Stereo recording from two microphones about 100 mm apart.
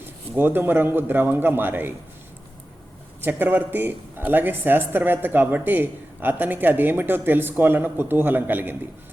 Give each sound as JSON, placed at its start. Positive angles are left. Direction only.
{"t": 0.3, "sound": "speech", "side_deg": -20}
{"t": 3.2, "sound": "speech", "side_deg": -20}